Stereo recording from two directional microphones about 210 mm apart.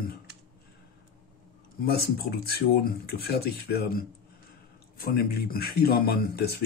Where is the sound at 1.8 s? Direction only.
50° left (ahead or behind).